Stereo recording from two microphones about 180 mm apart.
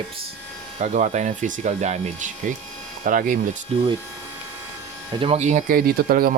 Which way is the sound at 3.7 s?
35° right (ahead or behind).